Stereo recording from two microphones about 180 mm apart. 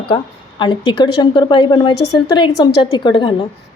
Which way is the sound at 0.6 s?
25° left (ahead or behind).